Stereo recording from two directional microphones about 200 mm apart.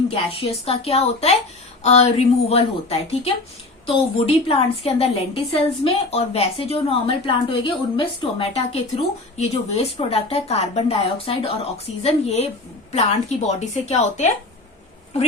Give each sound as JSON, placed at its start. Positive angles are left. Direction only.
{"t": 0.1, "sound": "a woman's voice", "side_deg": 30}